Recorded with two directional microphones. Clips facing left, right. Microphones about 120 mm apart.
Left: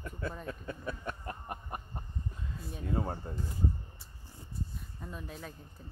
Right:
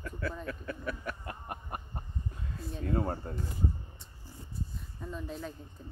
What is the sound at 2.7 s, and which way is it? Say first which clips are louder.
Speech: right 3 dB; 10° left (ahead or behind).